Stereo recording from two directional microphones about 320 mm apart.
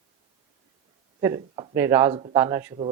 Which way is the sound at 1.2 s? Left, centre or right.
Centre.